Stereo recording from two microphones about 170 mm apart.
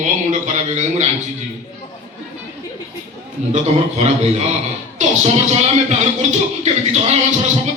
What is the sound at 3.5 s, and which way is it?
Speech, 40° right (ahead or behind).